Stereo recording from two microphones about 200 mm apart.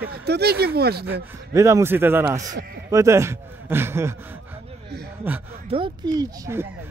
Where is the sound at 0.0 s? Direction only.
55° right (ahead or behind).